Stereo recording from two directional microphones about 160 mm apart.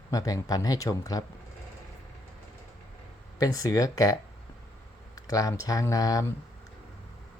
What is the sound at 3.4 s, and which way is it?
Speech, 20° left (ahead or behind).